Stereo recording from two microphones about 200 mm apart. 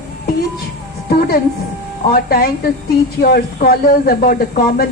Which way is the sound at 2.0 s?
50° left (ahead or behind).